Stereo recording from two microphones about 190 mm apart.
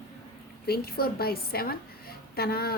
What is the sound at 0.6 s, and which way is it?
A woman's voice, 55° left (ahead or behind).